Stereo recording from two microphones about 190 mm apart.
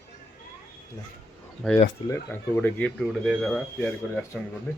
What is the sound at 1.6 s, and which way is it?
Speech, 5° left (ahead or behind).